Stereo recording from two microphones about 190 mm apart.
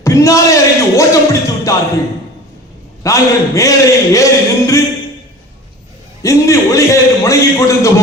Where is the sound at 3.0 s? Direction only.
15° left (ahead or behind).